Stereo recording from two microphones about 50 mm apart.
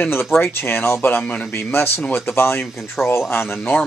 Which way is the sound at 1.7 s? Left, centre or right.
Left.